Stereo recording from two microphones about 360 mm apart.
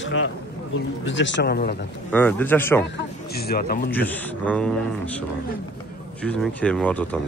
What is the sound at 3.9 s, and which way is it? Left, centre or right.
Speech, centre.